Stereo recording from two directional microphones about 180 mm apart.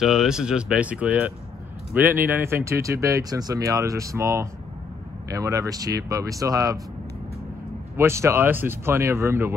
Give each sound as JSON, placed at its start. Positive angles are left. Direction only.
{"t": 0.0, "sound": "speech", "side_deg": 0}
{"t": 8.0, "sound": "speech", "side_deg": -15}